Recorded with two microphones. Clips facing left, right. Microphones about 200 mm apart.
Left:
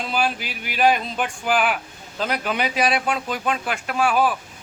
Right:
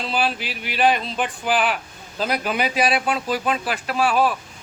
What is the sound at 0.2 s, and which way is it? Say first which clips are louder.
A man's voice: left 1 dB; centre (ahead or behind).